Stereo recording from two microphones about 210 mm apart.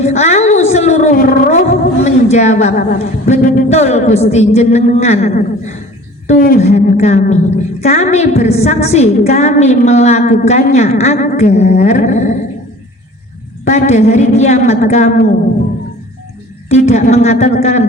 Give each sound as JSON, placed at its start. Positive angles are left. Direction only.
{"t": 0.0, "sound": "a woman's voice", "side_deg": 30}
{"t": 13.7, "sound": "speech", "side_deg": 35}
{"t": 16.6, "sound": "speech", "side_deg": 30}